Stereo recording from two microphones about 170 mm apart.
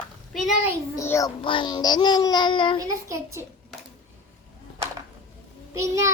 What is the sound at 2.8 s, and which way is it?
Speech, 20° right (ahead or behind).